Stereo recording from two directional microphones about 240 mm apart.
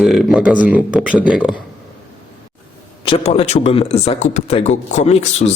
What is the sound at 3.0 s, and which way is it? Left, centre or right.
Speech, left.